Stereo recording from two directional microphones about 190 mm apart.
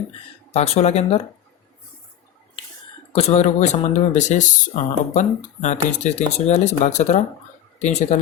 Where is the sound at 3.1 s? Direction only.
35° left (ahead or behind).